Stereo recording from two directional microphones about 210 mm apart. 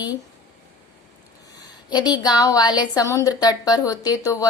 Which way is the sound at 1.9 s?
20° left (ahead or behind).